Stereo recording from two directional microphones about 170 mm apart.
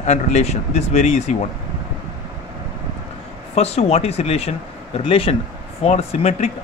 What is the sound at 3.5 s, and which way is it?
Speech, 40° left (ahead or behind).